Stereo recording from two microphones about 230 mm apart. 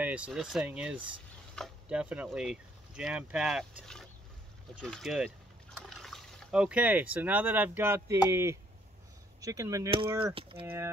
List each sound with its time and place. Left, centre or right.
0.0 s speech: centre; by 10.7 s right